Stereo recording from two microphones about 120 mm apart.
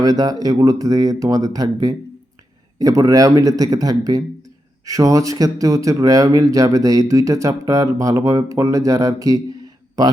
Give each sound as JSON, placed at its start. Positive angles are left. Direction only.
{"t": 0.0, "sound": "speech", "side_deg": -30}